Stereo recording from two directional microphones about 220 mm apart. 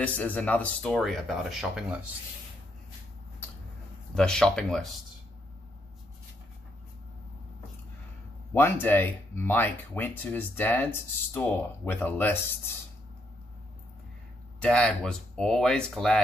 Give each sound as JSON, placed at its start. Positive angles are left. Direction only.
{"t": 0.0, "sound": "speech", "side_deg": 5}
{"t": 4.1, "sound": "speech", "side_deg": 5}
{"t": 8.5, "sound": "speech", "side_deg": 10}
{"t": 14.6, "sound": "speech", "side_deg": 5}